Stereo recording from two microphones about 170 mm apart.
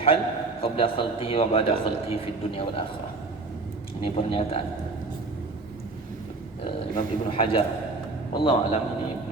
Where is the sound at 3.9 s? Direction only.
35° left (ahead or behind).